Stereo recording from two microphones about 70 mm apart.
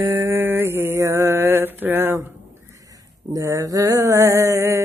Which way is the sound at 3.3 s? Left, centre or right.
Right.